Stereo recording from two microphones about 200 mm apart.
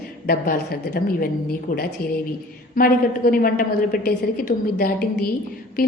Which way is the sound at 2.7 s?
45° left (ahead or behind).